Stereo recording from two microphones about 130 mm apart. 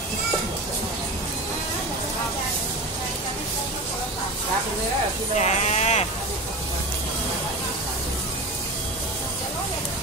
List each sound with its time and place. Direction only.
5.4 s sheep: 60° left (ahead or behind)